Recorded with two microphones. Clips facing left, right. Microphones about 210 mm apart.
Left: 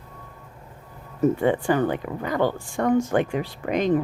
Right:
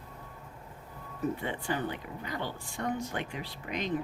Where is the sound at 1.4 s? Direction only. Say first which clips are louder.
Left 13 dB; 75° left (ahead or behind).